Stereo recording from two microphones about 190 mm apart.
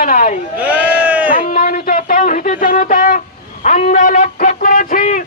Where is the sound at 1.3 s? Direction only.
50° left (ahead or behind).